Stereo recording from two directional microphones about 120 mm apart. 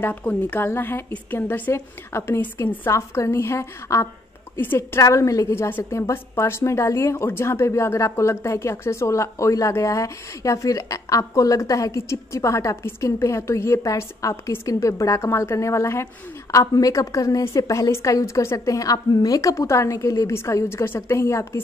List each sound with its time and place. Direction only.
0.0 s a woman's voice: 15° left (ahead or behind)